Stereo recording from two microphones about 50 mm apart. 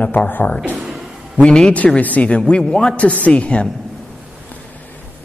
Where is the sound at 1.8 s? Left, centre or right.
Left.